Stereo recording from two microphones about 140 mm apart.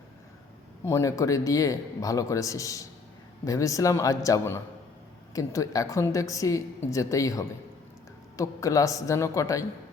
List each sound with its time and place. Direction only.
0.9 s a woman's voice: 20° left (ahead or behind)